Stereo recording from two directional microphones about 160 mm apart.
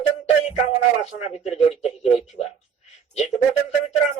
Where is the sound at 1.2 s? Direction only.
45° left (ahead or behind).